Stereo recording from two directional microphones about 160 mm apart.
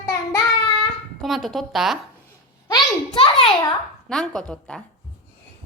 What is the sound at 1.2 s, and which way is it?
Speech, centre (ahead or behind).